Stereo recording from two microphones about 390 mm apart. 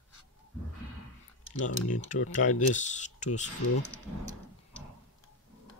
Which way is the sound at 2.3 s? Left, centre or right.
Centre.